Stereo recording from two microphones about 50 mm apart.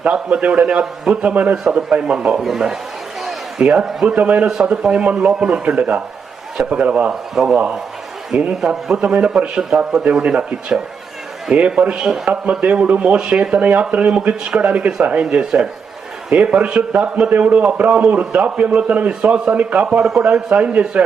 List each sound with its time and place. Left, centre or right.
0.0 s a man's voice: right
1.7 s a man's voice: right
3.6 s a man's voice: right
4.6 s a man's voice: centre
7.1 s a man's voice: centre
8.4 s a man's voice: right
17.2 s a man's voice: right